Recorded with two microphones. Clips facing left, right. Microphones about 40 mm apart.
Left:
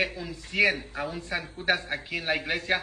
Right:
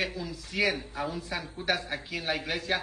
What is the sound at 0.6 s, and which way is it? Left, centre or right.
A man's voice, left.